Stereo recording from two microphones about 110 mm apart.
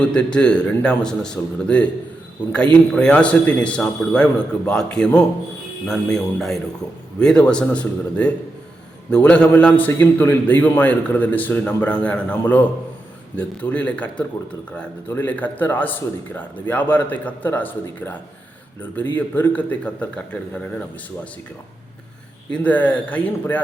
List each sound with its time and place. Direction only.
0.0 s a man's voice: 10° left (ahead or behind)
2.9 s a man's voice: 10° left (ahead or behind)
22.5 s a man's voice: 15° left (ahead or behind)